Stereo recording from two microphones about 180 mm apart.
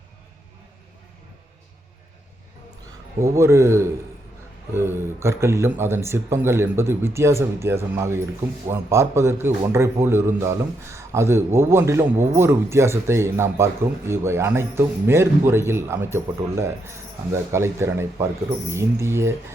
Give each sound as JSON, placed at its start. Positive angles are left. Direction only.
{"t": 3.2, "sound": "a man's voice", "side_deg": -15}